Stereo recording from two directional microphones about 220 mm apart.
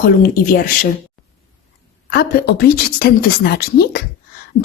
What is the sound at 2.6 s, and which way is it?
A woman's voice, 45° left (ahead or behind).